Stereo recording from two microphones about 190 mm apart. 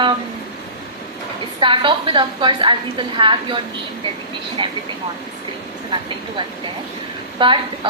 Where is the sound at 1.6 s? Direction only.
25° right (ahead or behind).